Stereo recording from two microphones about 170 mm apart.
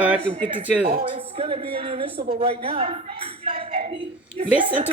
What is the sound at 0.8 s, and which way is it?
Speech, 60° right (ahead or behind).